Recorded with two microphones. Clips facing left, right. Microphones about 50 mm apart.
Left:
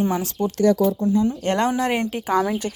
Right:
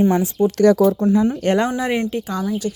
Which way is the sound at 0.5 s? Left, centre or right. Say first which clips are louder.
Right 4 dB; right.